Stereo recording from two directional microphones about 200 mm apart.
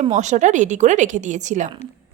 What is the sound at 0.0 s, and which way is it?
A woman's voice, 35° right (ahead or behind).